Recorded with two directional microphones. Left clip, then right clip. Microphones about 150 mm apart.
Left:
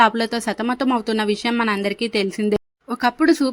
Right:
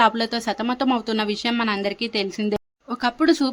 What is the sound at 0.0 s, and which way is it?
Speech, 20° left (ahead or behind).